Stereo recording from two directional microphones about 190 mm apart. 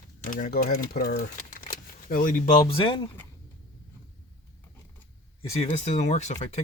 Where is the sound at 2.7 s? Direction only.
25° left (ahead or behind).